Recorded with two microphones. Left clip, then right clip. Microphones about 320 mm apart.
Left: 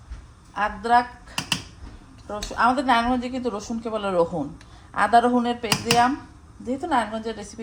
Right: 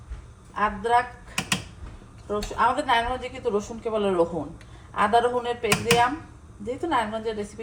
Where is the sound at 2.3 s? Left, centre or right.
Left.